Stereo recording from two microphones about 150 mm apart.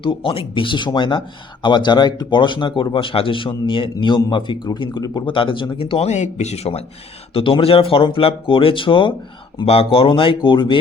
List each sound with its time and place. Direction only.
0.0 s a man's voice: 35° left (ahead or behind)